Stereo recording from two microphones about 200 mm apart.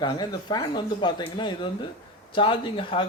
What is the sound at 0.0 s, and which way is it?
Speech, 20° left (ahead or behind).